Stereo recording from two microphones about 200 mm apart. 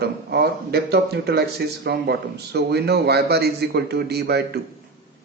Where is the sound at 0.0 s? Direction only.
50° right (ahead or behind).